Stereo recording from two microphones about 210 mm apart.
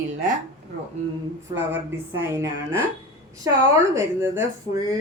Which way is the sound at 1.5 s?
10° right (ahead or behind).